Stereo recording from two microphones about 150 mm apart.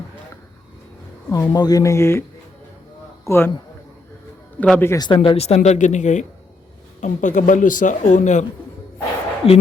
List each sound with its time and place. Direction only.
1.3 s speech: 25° left (ahead or behind)
3.2 s speech: 15° left (ahead or behind)
4.5 s a man's voice: 10° left (ahead or behind)
4.9 s speech: 30° left (ahead or behind); by 8.4 s 55° left (ahead or behind)
9.4 s speech: 40° left (ahead or behind)